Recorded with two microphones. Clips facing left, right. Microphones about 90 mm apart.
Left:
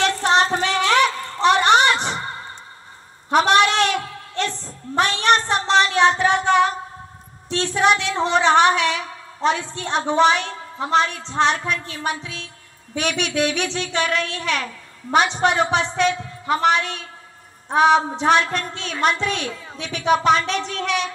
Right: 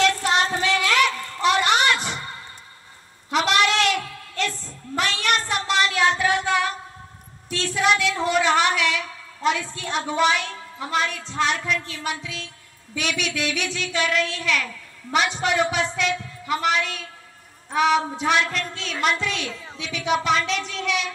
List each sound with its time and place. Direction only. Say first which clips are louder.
0.2 s child singing: left 4 dB; 35° left (ahead or behind)
3.3 s a sound: left 5 dB; 40° left (ahead or behind)
12.9 s a woman's voice: left 4 dB; 40° left (ahead or behind)